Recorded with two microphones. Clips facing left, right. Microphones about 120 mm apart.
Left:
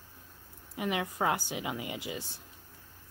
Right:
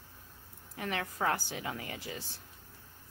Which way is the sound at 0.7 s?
15° left (ahead or behind).